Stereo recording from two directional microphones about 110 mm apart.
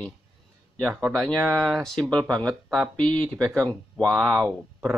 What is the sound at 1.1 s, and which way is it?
Speech, 5° left (ahead or behind).